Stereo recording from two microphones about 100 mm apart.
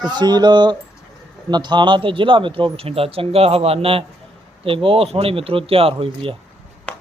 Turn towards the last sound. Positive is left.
turn(degrees=-65)  # may be behind; listen again after turning